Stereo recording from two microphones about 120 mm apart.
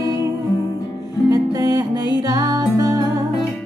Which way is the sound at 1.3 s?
30° right (ahead or behind).